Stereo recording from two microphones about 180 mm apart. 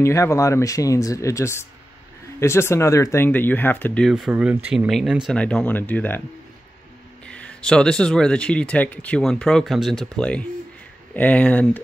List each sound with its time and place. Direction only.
0.0 s speech: 15° left (ahead or behind)
7.2 s speech: 5° left (ahead or behind)